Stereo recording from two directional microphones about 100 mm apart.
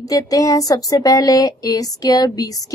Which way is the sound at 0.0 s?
35° left (ahead or behind).